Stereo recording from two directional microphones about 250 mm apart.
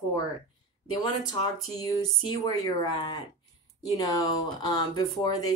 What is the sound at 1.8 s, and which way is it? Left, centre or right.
Speech, centre.